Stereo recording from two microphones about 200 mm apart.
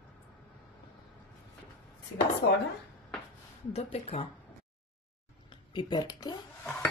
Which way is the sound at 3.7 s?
30° left (ahead or behind).